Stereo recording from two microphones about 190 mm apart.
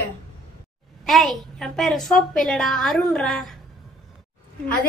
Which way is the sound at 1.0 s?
Centre (ahead or behind).